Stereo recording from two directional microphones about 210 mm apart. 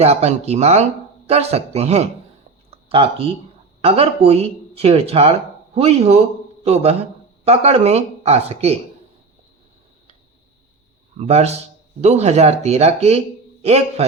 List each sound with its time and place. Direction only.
0.0 s speech: 30° right (ahead or behind)
2.6 s a sound: 25° right (ahead or behind)
3.8 s speech: 25° right (ahead or behind)
7.4 s speech: 30° right (ahead or behind)
11.2 s speech: 30° right (ahead or behind)